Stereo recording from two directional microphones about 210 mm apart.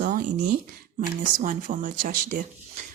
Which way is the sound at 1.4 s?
40° right (ahead or behind).